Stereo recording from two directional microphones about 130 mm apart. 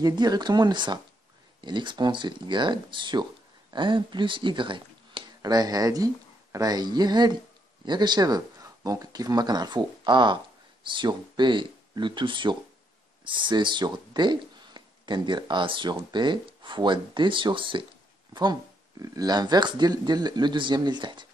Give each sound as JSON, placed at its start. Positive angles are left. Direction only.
{"t": 0.0, "sound": "speech", "side_deg": -30}